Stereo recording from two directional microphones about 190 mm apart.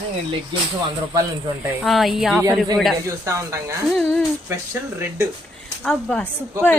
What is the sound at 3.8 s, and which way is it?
Speech, centre (ahead or behind).